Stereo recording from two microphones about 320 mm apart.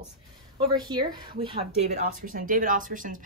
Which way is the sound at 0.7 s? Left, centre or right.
Centre.